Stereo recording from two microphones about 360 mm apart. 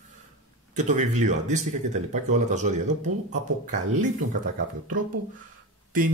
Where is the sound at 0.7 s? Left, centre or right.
Centre.